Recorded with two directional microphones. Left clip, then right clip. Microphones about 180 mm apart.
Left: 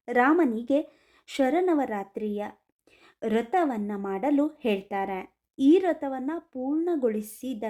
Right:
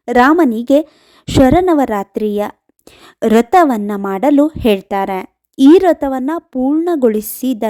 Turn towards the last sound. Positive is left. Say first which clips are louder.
# right 15 dB
turn(degrees=-45)  # may be behind; listen again after turning